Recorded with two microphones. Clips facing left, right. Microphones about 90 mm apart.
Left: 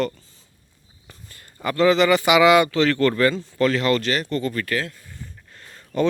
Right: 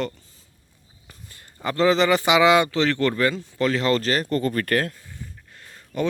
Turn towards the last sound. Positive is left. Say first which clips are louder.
# left 4 dB
turn(degrees=-5)  # may be behind; listen again after turning